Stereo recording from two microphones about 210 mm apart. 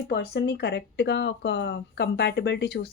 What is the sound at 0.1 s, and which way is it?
Speech, 50° left (ahead or behind).